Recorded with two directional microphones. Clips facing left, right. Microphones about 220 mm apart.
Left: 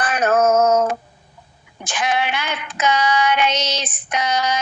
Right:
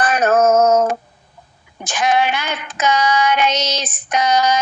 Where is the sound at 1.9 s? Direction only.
45° right (ahead or behind).